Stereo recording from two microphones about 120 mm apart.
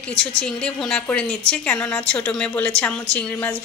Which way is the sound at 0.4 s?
10° left (ahead or behind).